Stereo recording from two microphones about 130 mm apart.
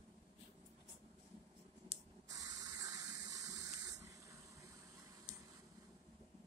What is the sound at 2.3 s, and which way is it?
Water, 25° right (ahead or behind).